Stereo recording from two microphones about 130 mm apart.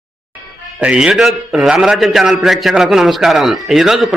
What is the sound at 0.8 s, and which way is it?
A man's voice, 10° right (ahead or behind).